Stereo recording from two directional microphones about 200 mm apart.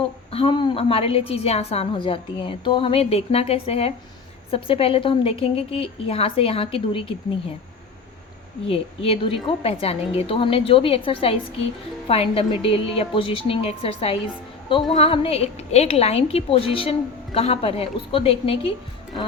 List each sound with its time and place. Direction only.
0.0 s a woman's voice: 30° left (ahead or behind)
8.6 s a woman's voice: 30° left (ahead or behind)